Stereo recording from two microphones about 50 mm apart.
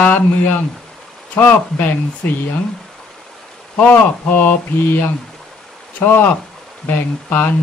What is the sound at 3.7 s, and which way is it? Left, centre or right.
Speech, left.